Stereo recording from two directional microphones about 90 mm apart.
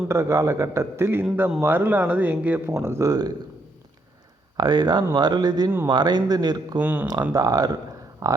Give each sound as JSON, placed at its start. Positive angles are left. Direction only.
{"t": 0.1, "sound": "a man's voice", "side_deg": -35}
{"t": 3.1, "sound": "speech", "side_deg": -50}
{"t": 4.5, "sound": "speech", "side_deg": -50}
{"t": 6.7, "sound": "speech", "side_deg": -20}
{"t": 7.1, "sound": "a man's voice", "side_deg": -45}